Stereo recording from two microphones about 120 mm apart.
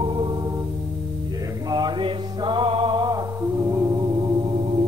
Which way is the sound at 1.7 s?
35° right (ahead or behind).